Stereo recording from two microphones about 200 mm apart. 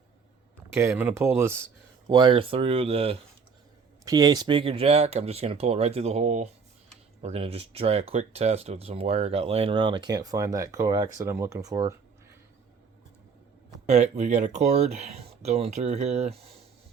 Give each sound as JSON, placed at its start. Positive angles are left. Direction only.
{"t": 0.7, "sound": "speech", "side_deg": -15}
{"t": 4.0, "sound": "speech", "side_deg": -20}
{"t": 13.8, "sound": "speech", "side_deg": -35}